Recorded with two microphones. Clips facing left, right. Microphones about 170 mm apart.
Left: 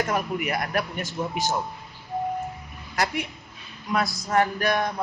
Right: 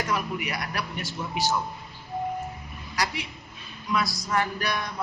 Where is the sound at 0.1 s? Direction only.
50° left (ahead or behind).